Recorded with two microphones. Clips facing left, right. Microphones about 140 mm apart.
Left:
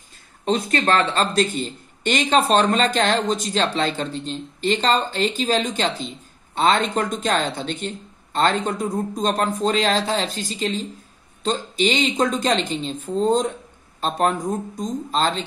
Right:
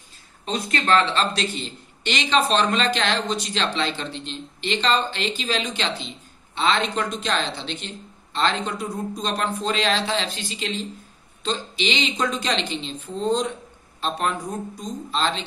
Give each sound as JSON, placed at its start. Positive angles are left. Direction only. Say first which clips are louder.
{"t": 0.5, "sound": "speech", "louder": "left 2 dB", "side_deg": 45}